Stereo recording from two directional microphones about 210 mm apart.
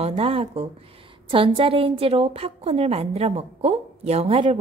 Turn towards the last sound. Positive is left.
turn(degrees=-25)  # may be behind; listen again after turning